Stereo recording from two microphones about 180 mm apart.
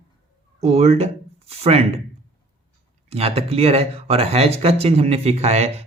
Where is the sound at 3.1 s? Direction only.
35° right (ahead or behind).